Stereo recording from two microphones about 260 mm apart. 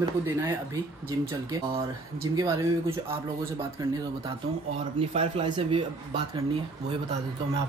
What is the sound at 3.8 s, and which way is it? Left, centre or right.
Speech, centre.